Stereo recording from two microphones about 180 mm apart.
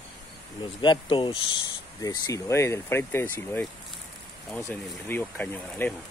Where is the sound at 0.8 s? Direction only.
25° left (ahead or behind); by 5.9 s 10° left (ahead or behind).